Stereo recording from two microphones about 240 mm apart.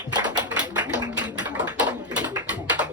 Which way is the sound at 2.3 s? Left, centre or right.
Centre.